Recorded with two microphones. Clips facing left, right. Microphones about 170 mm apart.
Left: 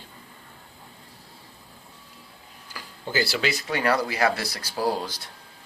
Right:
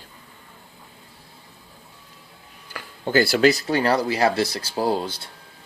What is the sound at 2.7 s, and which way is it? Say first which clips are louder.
Speech: right 7 dB; 55° right (ahead or behind).